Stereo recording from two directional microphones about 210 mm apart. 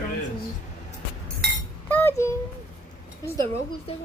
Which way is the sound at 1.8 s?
10° left (ahead or behind).